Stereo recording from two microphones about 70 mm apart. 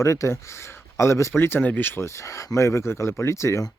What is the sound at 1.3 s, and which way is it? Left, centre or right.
Speech, left.